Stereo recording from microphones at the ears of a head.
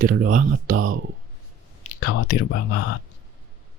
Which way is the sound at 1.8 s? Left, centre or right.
Left.